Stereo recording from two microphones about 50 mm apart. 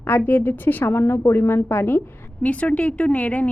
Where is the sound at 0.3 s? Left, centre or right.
Left.